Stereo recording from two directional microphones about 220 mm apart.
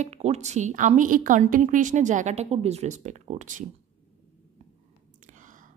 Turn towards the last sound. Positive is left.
turn(degrees=-35)  # may be behind; listen again after turning